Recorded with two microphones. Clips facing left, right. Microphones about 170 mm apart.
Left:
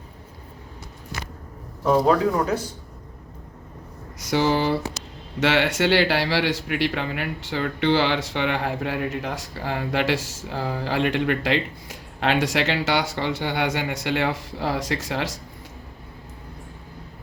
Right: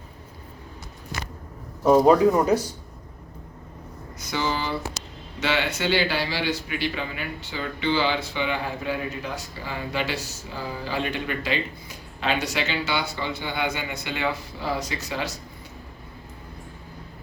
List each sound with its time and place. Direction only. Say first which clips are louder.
1.8 s speech: right 3 dB; 15° right (ahead or behind)
4.3 s speech: left 6 dB; 70° left (ahead or behind)
5.4 s speech: left 5 dB; 80° left